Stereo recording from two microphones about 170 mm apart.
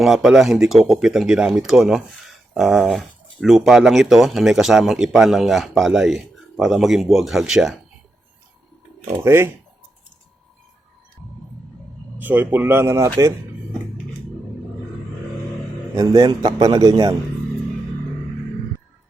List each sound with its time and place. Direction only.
0.0 s speech: centre (ahead or behind)
9.2 s speech: 15° right (ahead or behind)
12.2 s speech: 10° right (ahead or behind)
16.0 s a man's voice: 20° right (ahead or behind)